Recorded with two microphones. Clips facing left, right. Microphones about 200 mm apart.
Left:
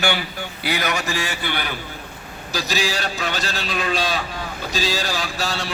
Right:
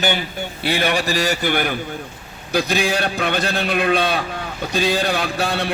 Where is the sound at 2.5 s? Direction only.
55° right (ahead or behind).